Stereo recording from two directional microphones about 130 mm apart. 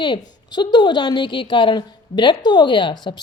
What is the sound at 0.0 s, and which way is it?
A woman's voice, 35° left (ahead or behind).